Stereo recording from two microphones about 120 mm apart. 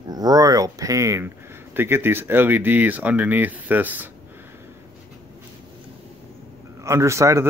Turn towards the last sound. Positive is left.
turn(degrees=-25)  # may be behind; listen again after turning